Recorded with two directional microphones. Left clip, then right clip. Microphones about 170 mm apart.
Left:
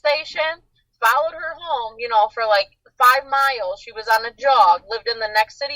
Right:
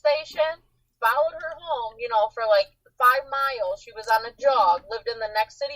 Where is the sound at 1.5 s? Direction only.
30° left (ahead or behind).